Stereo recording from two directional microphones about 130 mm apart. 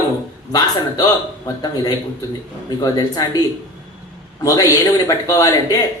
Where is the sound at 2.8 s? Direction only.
30° left (ahead or behind).